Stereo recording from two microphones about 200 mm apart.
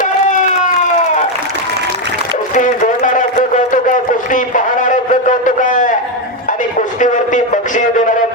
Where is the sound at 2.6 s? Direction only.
40° left (ahead or behind).